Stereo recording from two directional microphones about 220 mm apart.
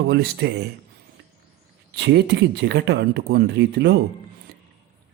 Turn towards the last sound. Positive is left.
turn(degrees=-50)  # may be behind; listen again after turning